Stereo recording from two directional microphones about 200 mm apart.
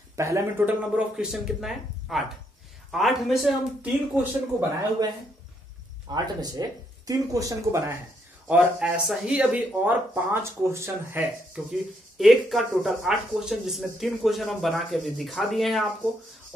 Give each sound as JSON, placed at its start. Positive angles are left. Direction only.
{"t": 0.1, "sound": "speech", "side_deg": -15}
{"t": 6.1, "sound": "speech", "side_deg": -20}
{"t": 12.2, "sound": "speech", "side_deg": 0}